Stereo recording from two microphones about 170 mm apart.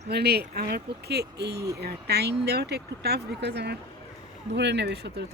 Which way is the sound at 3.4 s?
85° right.